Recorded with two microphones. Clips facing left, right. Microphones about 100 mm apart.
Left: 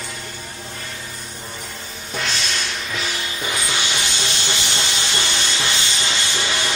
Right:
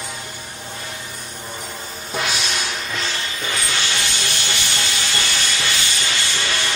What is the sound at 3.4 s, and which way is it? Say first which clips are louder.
Music: left 1 dB; 15° left (ahead or behind).